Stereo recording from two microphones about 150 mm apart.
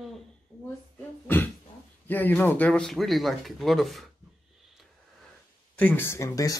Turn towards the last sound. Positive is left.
turn(degrees=25)  # may be behind; listen again after turning